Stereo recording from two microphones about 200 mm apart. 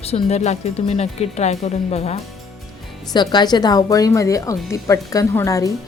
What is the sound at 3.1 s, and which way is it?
A woman's voice, 20° left (ahead or behind).